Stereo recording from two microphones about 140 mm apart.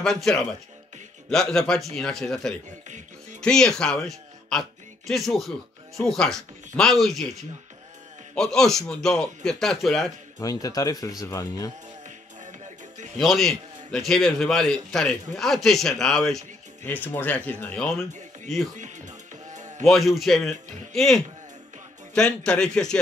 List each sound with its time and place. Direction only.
0.0 s a man's voice: centre (ahead or behind)
8.4 s a man's voice: 5° left (ahead or behind)
10.4 s speech: 25° left (ahead or behind)
12.4 s music: 60° right (ahead or behind)
13.2 s a man's voice: centre (ahead or behind)
16.8 s speech: 15° left (ahead or behind)
18.8 s music: 60° right (ahead or behind)
19.9 s a man's voice: centre (ahead or behind)